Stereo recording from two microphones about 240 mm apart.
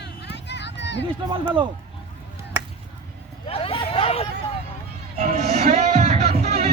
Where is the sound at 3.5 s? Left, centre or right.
Left.